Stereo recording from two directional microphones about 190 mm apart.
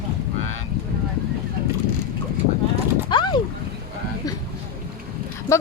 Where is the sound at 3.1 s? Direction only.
25° left (ahead or behind).